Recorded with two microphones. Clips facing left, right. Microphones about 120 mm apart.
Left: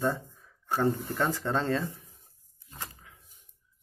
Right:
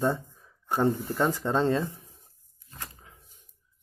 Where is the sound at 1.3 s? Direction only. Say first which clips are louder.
Right 5 dB; 20° right (ahead or behind).